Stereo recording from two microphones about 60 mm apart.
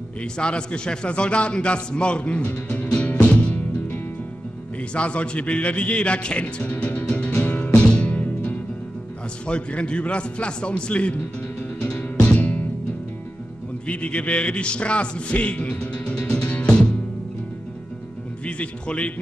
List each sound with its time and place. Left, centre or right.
0.2 s a man's voice: centre
4.9 s a man's voice: centre
7.2 s music: left
9.5 s a man's voice: centre
11.9 s music: centre
12.3 s music: left
13.8 s music: centre
18.4 s speech: centre